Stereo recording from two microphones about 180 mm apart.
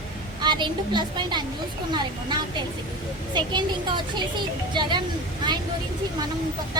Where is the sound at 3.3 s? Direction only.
25° right (ahead or behind).